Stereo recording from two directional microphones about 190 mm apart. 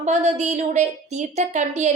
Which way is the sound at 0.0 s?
35° right (ahead or behind).